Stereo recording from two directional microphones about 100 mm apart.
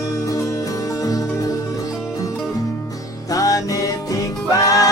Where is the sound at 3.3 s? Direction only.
35° left (ahead or behind).